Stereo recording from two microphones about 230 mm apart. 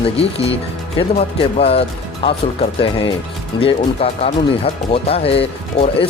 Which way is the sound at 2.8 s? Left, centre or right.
Left.